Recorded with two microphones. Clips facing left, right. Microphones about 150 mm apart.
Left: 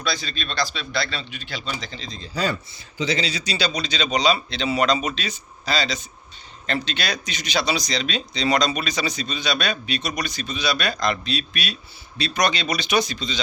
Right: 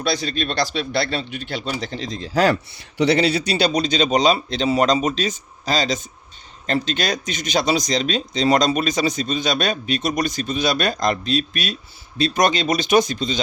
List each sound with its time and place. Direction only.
0.0 s speech: 60° right (ahead or behind)